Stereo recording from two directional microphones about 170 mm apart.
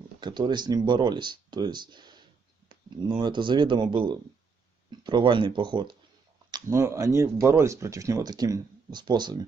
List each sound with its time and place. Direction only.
0.2 s speech: 25° right (ahead or behind)